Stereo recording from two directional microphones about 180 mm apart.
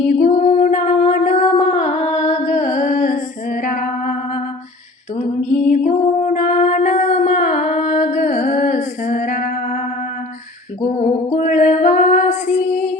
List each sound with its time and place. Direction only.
0.0 s female singing: 45° left (ahead or behind)
5.1 s singing: 45° left (ahead or behind)
9.0 s music: 50° left (ahead or behind)
11.0 s female singing: 40° left (ahead or behind)